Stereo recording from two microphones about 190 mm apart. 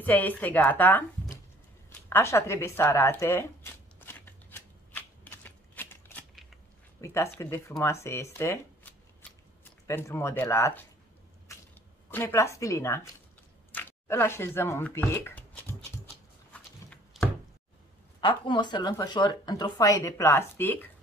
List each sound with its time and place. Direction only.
0.0 s speech: 10° left (ahead or behind)
2.0 s zipper: 10° left (ahead or behind)
7.0 s speech: 15° left (ahead or behind)
11.5 s biting: 15° left (ahead or behind)
12.1 s speech: 10° left (ahead or behind)
16.5 s walk: 5° left (ahead or behind)
18.2 s speech: 25° left (ahead or behind)